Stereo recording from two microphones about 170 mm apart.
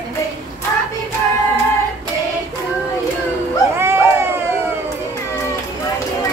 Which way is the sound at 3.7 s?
15° right (ahead or behind).